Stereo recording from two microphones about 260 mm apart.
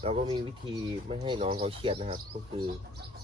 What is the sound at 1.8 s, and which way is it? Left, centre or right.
Speech, right.